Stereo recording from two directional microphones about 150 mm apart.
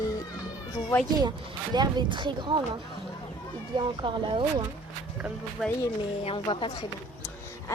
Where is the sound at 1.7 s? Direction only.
30° right (ahead or behind).